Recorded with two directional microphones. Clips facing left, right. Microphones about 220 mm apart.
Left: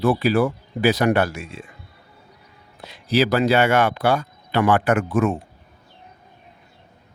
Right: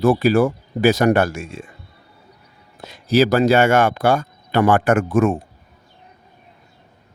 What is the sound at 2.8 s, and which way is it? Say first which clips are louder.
Speech: right 4 dB; 45° right (ahead or behind).